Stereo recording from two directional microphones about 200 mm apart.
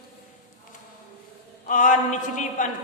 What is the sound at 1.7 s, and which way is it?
A man's voice, 40° left (ahead or behind).